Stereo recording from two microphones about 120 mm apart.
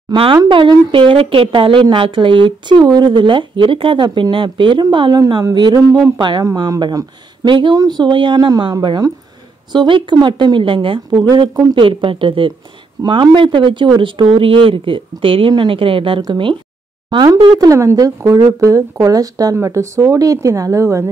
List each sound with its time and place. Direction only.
0.1 s speech: 40° right (ahead or behind)
11.7 s speech: 45° right (ahead or behind); by 21.1 s 25° right (ahead or behind)